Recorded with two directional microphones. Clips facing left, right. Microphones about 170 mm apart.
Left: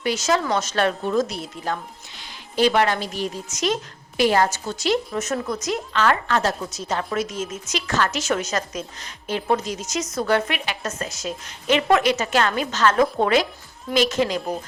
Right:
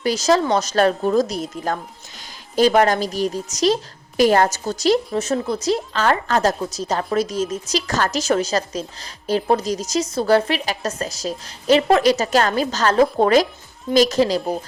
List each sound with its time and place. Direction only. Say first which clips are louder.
0.0 s a woman's voice: right 4 dB; 35° right (ahead or behind)